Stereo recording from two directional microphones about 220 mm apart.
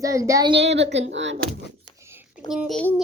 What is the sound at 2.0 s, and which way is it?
Whispering, 10° right (ahead or behind).